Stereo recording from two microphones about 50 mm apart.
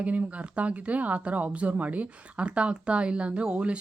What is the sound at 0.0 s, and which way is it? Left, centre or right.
Speech, right.